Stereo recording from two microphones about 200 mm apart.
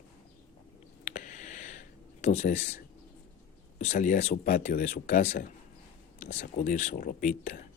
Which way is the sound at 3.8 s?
40° left (ahead or behind).